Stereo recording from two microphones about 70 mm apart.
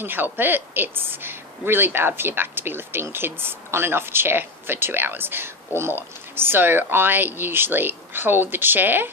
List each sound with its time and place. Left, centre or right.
0.0 s speech: right